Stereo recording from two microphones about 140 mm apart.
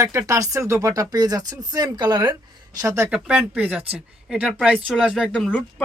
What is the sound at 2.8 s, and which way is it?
Speech, 20° right (ahead or behind).